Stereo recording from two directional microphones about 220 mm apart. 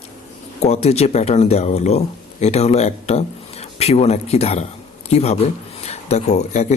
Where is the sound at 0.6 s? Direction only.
30° left (ahead or behind).